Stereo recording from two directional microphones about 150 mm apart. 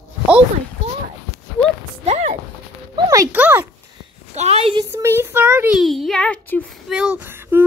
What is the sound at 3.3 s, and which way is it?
Speech, 10° right (ahead or behind).